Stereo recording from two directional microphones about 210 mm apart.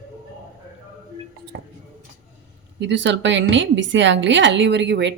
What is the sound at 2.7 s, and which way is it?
A woman's voice, 55° right (ahead or behind).